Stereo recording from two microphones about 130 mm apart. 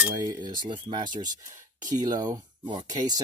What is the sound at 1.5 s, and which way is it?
Speech, 30° right (ahead or behind).